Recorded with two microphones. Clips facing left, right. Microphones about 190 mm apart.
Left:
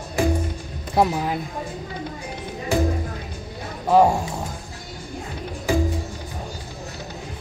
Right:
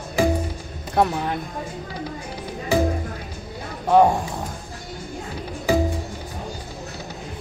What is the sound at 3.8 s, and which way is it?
Speech, centre (ahead or behind).